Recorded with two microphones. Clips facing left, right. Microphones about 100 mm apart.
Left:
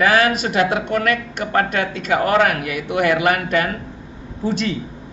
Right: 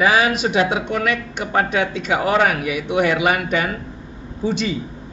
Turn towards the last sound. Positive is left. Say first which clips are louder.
# even
turn(degrees=0)  # may be behind; listen again after turning